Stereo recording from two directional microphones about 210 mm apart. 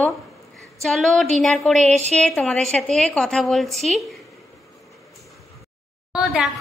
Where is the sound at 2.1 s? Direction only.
Centre (ahead or behind).